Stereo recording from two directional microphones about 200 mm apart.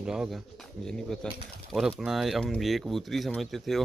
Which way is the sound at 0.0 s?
5° right (ahead or behind).